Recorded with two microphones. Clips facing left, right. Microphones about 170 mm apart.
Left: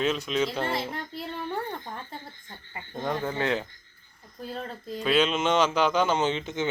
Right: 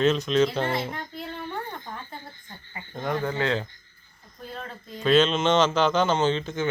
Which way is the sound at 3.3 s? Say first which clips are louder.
Right 1 dB; 15° left (ahead or behind).